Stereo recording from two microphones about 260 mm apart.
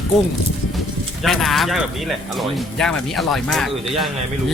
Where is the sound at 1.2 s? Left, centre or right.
Centre.